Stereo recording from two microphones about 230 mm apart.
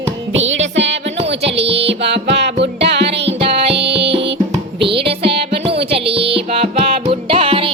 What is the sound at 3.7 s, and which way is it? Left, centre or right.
Music, right.